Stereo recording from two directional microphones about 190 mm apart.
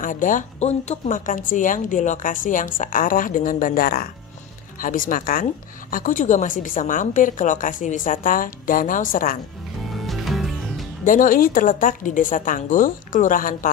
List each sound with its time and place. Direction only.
0.0 s a woman's voice: 45° left (ahead or behind)
9.9 s music: centre (ahead or behind)
11.1 s a woman's voice: 45° left (ahead or behind)